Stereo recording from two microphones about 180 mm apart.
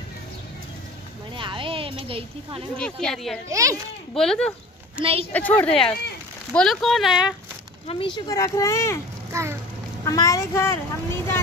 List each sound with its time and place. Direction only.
1.3 s a sound: 30° right (ahead or behind)
2.7 s speech: 5° left (ahead or behind)
3.4 s a child's voice: 15° right (ahead or behind)
4.1 s a child's voice: centre (ahead or behind)
7.8 s speech: 30° left (ahead or behind)
9.3 s speech: 15° right (ahead or behind)
10.0 s a child's voice: 20° left (ahead or behind)